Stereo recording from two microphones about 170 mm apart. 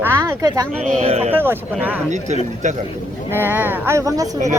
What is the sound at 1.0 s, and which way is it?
Speech, 35° right (ahead or behind).